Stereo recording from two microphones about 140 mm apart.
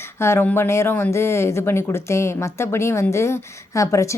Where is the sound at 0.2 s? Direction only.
15° left (ahead or behind).